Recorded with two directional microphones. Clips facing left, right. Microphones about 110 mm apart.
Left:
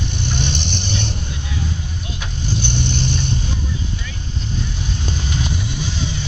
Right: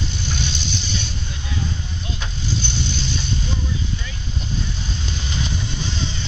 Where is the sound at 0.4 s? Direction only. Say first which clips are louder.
Left 4 dB; 60° left (ahead or behind).